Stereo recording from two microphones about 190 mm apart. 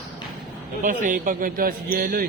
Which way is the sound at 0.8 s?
45° right (ahead or behind).